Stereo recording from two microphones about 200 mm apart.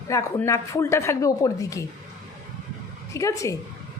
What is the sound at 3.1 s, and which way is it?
Speech, 15° left (ahead or behind).